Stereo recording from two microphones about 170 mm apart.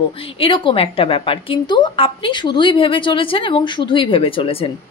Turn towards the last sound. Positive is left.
turn(degrees=30)  # may be behind; listen again after turning